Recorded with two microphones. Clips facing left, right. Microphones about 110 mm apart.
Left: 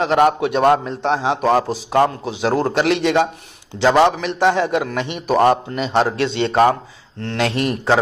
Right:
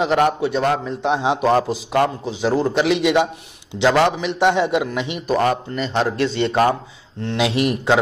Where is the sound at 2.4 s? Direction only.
55° left (ahead or behind).